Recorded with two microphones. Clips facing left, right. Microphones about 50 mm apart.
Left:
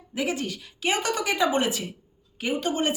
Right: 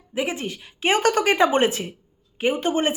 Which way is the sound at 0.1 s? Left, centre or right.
Right.